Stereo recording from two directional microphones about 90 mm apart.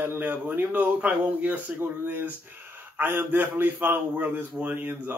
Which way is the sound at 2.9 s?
20° right (ahead or behind).